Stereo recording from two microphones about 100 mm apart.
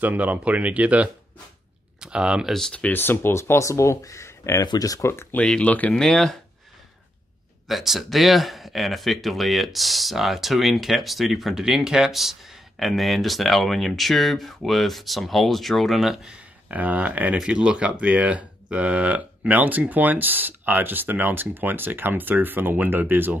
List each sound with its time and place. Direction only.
0.0 s speech: 15° right (ahead or behind)
2.5 s speech: 10° left (ahead or behind); by 5.1 s 35° left (ahead or behind)
5.1 s speech: 25° left (ahead or behind)
5.4 s speech: 15° left (ahead or behind)
7.6 s speech: centre (ahead or behind); by 23.3 s 20° right (ahead or behind)